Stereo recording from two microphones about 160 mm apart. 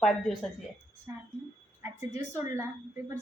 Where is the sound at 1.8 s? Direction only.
15° right (ahead or behind).